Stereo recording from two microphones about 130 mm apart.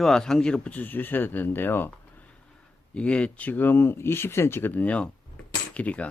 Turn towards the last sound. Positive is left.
turn(degrees=10)  # may be behind; listen again after turning